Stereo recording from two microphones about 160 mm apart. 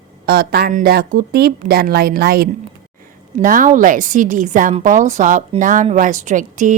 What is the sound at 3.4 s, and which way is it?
Speech, 55° right (ahead or behind).